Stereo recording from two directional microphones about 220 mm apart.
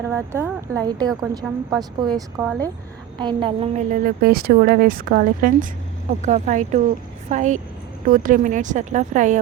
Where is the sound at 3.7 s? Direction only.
40° right (ahead or behind).